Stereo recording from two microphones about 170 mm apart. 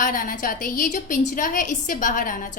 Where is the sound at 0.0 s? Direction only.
55° left (ahead or behind).